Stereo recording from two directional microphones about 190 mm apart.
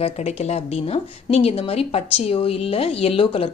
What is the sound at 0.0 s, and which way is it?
Speech, 35° left (ahead or behind).